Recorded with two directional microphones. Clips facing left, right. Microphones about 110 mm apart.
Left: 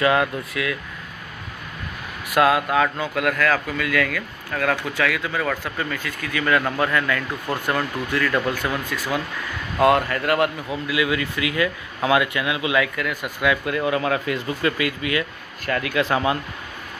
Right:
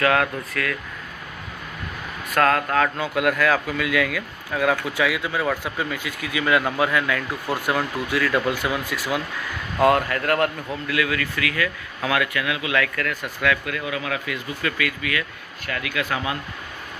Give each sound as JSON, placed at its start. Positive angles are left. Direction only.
{"t": 0.0, "sound": "speech", "side_deg": 5}
{"t": 2.3, "sound": "speech", "side_deg": 10}
{"t": 13.7, "sound": "speech", "side_deg": 35}
{"t": 15.6, "sound": "speech", "side_deg": 40}